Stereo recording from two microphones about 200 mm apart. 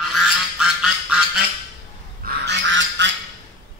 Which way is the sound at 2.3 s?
60° right (ahead or behind).